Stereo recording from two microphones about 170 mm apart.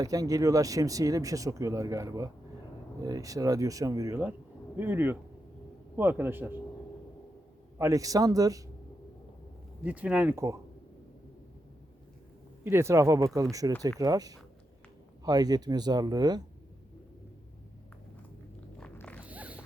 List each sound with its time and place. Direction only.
0.0 s speech: 20° right (ahead or behind)
7.8 s speech: 20° right (ahead or behind)
9.8 s speech: 10° right (ahead or behind)
12.6 s speech: 15° right (ahead or behind)
18.8 s a sound: 5° left (ahead or behind)
19.2 s a sound: 10° right (ahead or behind)